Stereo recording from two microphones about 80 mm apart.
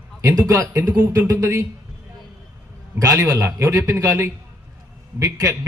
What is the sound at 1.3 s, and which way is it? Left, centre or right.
Speech, right.